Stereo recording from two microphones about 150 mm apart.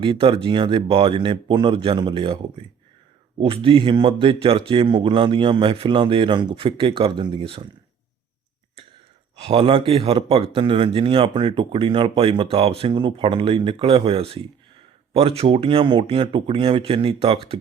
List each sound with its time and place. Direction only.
0.0 s speech: 35° right (ahead or behind)
9.5 s speech: 35° right (ahead or behind)